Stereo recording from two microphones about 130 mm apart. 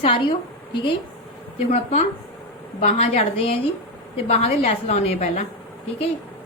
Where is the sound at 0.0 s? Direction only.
40° left (ahead or behind).